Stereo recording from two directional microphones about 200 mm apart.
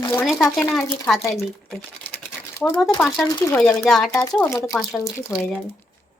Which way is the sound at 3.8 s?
Centre (ahead or behind).